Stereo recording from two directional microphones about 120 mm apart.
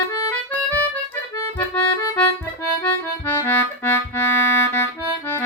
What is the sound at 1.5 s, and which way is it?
Accordion, 15° left (ahead or behind).